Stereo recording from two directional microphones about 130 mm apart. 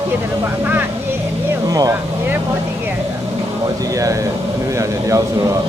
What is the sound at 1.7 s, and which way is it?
Speech, 25° right (ahead or behind).